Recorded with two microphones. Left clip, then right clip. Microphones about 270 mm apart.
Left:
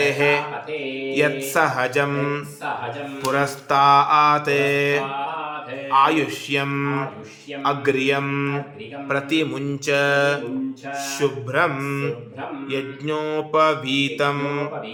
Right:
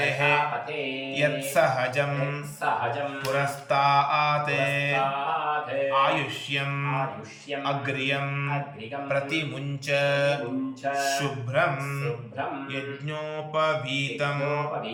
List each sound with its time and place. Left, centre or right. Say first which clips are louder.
0.0 s mantra: left 4 dB; centre